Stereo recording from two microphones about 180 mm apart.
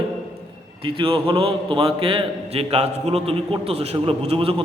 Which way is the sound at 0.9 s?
30° right (ahead or behind).